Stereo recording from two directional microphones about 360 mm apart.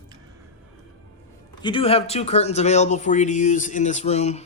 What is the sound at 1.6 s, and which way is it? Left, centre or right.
Speech, centre.